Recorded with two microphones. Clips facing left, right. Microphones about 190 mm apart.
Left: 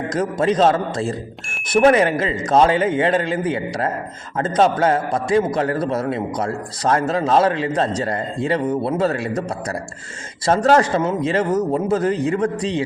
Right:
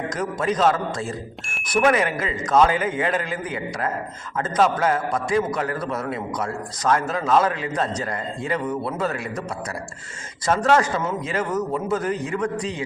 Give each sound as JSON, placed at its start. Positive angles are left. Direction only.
{"t": 0.1, "sound": "a man's voice", "side_deg": 30}